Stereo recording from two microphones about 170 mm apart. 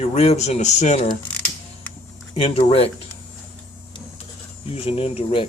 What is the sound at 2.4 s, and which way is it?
Speech, 35° left (ahead or behind).